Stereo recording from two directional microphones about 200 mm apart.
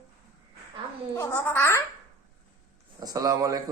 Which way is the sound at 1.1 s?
15° left (ahead or behind).